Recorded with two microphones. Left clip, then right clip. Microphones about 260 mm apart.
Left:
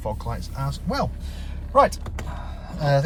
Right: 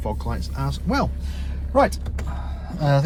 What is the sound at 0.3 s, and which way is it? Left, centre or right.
Speech, left.